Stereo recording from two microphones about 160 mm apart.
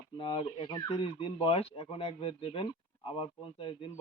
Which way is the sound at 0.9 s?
35° left (ahead or behind).